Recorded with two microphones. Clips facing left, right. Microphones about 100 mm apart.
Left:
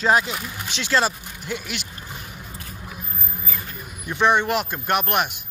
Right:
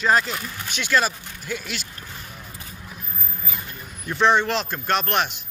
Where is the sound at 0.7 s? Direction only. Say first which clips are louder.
Even; 25° left (ahead or behind).